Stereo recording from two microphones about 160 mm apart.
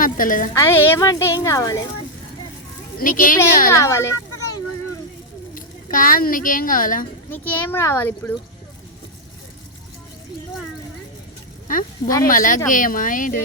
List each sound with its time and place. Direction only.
0.0 s speech: 55° left (ahead or behind)
0.5 s speech: 15° left (ahead or behind)
3.0 s speech: 60° left (ahead or behind)
3.7 s a child's voice: 20° left (ahead or behind)
5.5 s speech: 60° left (ahead or behind)
7.3 s a child's voice: 10° left (ahead or behind)
11.7 s speech: 55° left (ahead or behind)
12.0 s speech: 20° left (ahead or behind)
12.3 s speech: 55° left (ahead or behind)